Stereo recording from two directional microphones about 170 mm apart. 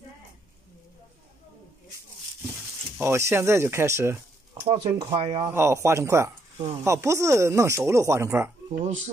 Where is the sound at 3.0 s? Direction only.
15° right (ahead or behind).